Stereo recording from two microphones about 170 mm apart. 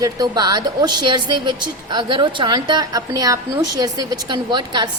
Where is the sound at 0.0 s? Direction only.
25° right (ahead or behind).